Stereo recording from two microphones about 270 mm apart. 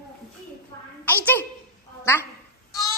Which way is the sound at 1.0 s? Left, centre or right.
Centre.